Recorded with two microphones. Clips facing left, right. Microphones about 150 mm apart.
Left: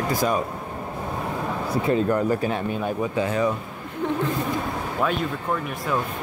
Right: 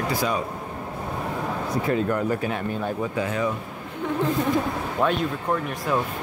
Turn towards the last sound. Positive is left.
turn(degrees=0)  # may be behind; listen again after turning